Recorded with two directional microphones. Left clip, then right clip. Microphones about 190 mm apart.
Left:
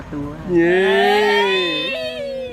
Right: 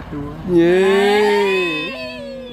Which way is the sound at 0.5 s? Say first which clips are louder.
Right 1 dB; 15° right (ahead or behind).